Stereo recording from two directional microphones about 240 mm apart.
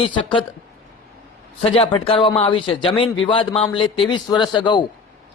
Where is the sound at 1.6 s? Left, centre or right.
Left.